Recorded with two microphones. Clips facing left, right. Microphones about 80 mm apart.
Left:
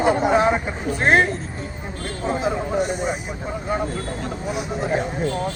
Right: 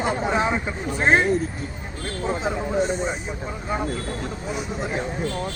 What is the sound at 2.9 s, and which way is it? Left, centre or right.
Speech, centre.